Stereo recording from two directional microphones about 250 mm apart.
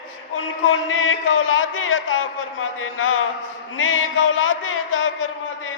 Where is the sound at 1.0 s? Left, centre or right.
Left.